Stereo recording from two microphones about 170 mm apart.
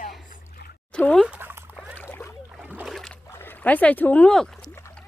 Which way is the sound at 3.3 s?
15° left (ahead or behind).